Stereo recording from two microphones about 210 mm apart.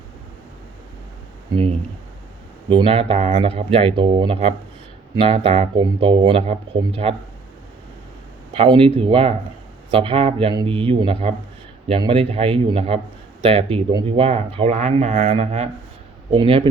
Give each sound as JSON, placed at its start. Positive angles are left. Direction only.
{"t": 2.6, "sound": "speech", "side_deg": -25}
{"t": 8.5, "sound": "speech", "side_deg": -25}